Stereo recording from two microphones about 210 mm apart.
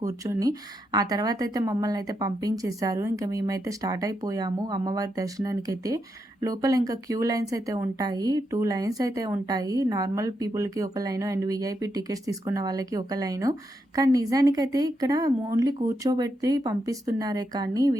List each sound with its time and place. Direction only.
0.0 s speech: 15° right (ahead or behind)